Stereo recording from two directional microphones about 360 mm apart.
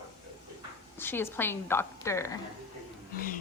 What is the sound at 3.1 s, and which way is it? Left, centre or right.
Speech, left.